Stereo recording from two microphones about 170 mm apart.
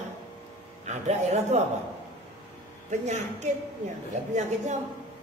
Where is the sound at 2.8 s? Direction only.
45° right (ahead or behind).